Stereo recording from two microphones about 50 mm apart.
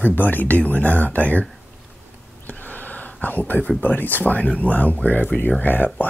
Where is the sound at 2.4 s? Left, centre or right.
Left.